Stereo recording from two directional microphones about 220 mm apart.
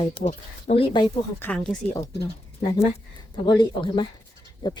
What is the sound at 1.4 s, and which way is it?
Speech, 5° left (ahead or behind).